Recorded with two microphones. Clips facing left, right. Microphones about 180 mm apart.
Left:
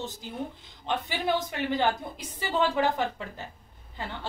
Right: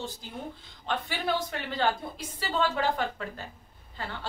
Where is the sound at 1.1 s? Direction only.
20° left (ahead or behind).